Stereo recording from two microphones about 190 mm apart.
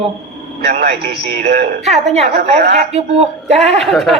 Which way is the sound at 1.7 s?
35° right (ahead or behind).